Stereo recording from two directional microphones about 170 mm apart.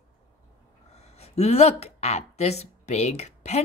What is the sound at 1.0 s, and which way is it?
A woman's voice, 40° left (ahead or behind).